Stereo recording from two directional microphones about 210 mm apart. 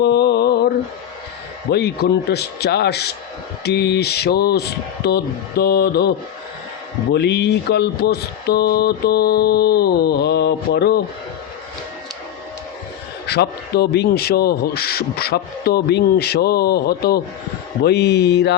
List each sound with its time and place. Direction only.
0.0 s mantra: 50° left (ahead or behind)
1.7 s speech: 50° left (ahead or behind)
13.2 s speech: 50° left (ahead or behind)